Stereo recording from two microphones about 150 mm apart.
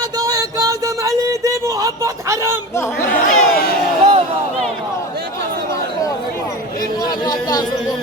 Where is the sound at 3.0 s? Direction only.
85° left.